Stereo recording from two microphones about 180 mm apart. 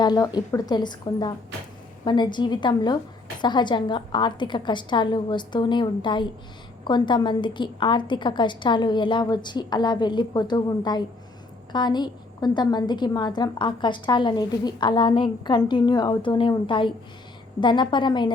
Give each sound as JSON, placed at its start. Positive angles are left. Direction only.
{"t": 0.0, "sound": "a woman's voice", "side_deg": 20}